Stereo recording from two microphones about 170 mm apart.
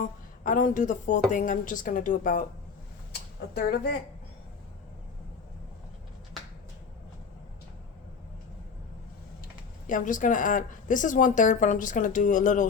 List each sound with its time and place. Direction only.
0.0 s a woman's voice: 50° left (ahead or behind)
3.5 s a woman's voice: 70° left (ahead or behind)
9.4 s speech: 50° left (ahead or behind)